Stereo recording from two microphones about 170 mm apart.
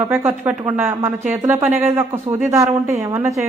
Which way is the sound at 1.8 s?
15° right (ahead or behind).